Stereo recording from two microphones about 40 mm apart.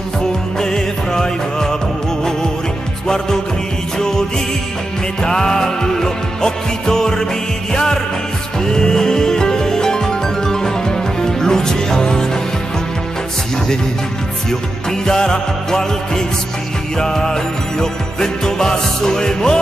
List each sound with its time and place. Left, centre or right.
0.6 s music: centre
5.2 s music: centre
14.5 s music: centre